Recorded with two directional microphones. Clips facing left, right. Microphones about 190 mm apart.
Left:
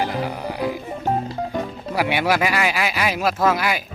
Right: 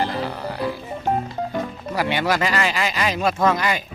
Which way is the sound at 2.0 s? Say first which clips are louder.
Left 1 dB; 10° left (ahead or behind).